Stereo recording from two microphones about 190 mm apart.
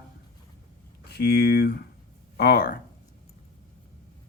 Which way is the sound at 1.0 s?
60° left (ahead or behind).